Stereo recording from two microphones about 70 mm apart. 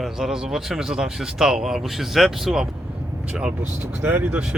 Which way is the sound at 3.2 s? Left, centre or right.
Centre.